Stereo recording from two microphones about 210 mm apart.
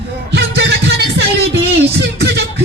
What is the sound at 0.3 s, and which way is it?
Music, 55° right (ahead or behind).